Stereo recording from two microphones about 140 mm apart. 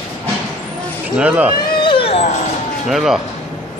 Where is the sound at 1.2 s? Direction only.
10° right (ahead or behind).